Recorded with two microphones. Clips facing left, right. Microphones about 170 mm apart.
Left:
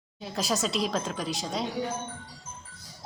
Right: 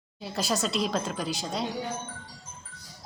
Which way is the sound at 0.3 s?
Centre (ahead or behind).